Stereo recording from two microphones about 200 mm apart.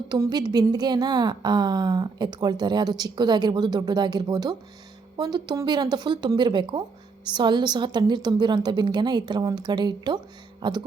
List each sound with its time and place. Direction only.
0.1 s a woman's voice: 20° right (ahead or behind)